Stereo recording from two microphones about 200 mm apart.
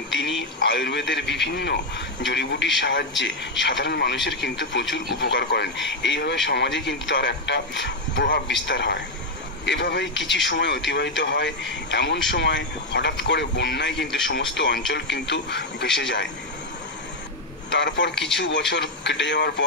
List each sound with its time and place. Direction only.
0.1 s a man's voice: 60° left (ahead or behind)
17.6 s a man's voice: 60° left (ahead or behind)